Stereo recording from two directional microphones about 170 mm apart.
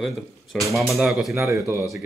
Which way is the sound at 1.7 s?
20° right (ahead or behind).